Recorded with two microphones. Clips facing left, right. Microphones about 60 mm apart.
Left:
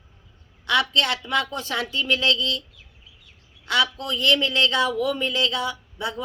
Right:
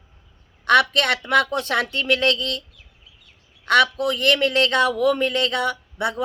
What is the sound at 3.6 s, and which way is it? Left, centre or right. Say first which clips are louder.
A man's voice: right 6 dB; right.